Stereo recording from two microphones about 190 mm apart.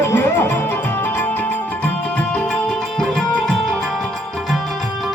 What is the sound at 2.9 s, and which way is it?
Music, 5° left (ahead or behind).